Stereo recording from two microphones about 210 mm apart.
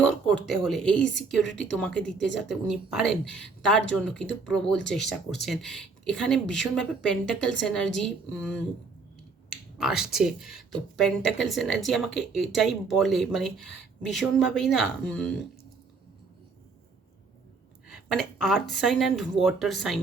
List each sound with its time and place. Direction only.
0.0 s speech: 5° left (ahead or behind)
9.5 s finger snapping: 5° right (ahead or behind)
9.9 s speech: 50° left (ahead or behind)
10.2 s speech: centre (ahead or behind)
17.8 s a sound: centre (ahead or behind)
18.7 s speech: centre (ahead or behind)